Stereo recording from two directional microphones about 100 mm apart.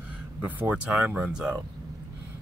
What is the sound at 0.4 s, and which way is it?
Speech, 20° right (ahead or behind).